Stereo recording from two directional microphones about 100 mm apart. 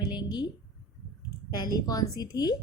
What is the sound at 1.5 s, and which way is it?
Speech, 40° left (ahead or behind).